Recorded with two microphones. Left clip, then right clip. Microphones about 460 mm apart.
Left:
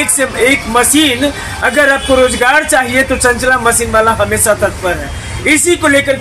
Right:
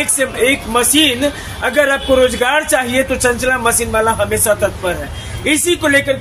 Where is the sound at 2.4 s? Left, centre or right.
Right.